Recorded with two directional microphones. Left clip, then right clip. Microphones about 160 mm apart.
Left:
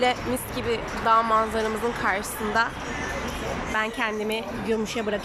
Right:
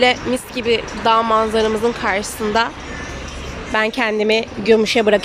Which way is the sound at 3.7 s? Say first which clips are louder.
Right 10 dB; 30° right (ahead or behind).